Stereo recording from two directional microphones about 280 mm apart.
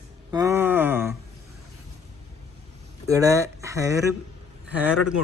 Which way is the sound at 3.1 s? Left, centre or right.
Centre.